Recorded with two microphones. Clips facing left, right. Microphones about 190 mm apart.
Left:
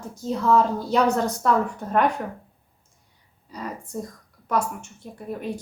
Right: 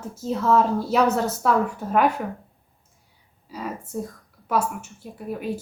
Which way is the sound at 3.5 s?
5° right (ahead or behind).